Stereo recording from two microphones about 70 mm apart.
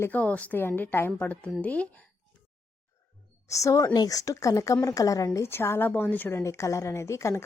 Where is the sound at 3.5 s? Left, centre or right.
Left.